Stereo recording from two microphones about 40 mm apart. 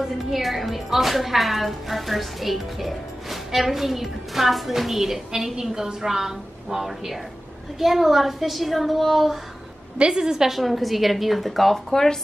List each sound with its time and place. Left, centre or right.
0.0 s a woman's voice: centre
9.9 s a woman's voice: right
10.6 s a woman's voice: centre